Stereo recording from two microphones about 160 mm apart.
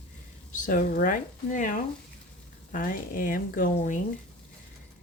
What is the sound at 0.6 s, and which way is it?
Speech, 60° left (ahead or behind).